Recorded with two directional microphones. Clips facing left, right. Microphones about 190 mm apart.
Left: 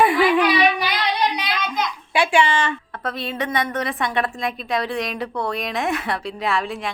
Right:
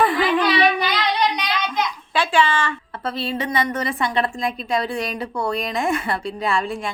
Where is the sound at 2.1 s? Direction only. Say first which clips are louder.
Left 1 dB; 15° left (ahead or behind).